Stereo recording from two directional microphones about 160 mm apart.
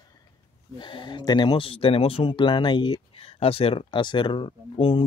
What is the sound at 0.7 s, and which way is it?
Speech, 30° left (ahead or behind).